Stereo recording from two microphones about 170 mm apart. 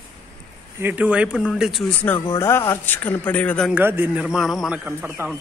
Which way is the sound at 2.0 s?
15° left (ahead or behind).